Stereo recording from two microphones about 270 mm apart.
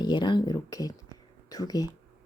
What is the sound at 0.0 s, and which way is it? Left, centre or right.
Speech, centre.